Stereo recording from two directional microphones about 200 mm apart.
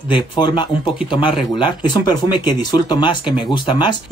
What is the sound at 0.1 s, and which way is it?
Speech, 25° left (ahead or behind).